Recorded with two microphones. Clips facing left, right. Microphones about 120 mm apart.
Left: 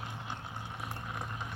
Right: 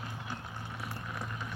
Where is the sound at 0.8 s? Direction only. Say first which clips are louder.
Even; 20° left (ahead or behind).